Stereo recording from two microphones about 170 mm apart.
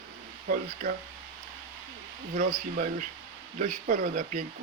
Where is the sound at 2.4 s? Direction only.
50° right (ahead or behind).